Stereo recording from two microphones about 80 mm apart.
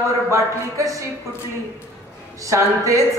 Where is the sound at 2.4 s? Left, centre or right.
Right.